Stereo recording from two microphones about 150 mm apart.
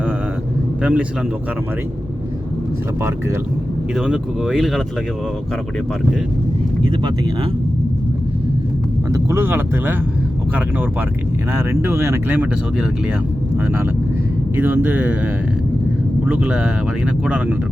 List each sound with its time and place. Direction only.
0.8 s a man's voice: 10° right (ahead or behind)
3.9 s speech: 5° right (ahead or behind)
9.0 s speech: 20° right (ahead or behind)
11.5 s speech: 15° right (ahead or behind)
13.7 s speech: 10° right (ahead or behind)
16.2 s speech: 10° right (ahead or behind)